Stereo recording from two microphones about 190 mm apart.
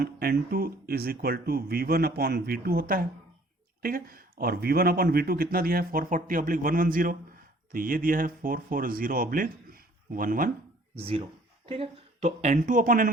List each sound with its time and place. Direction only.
0.0 s speech: 55° right (ahead or behind)
10.9 s speech: 30° right (ahead or behind)